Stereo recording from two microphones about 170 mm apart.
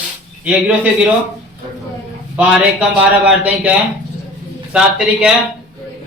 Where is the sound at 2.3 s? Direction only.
5° right (ahead or behind).